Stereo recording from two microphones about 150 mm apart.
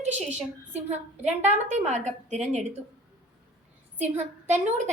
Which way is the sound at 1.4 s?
50° right (ahead or behind).